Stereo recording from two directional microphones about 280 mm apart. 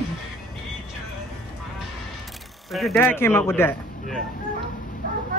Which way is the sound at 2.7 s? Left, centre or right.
Centre.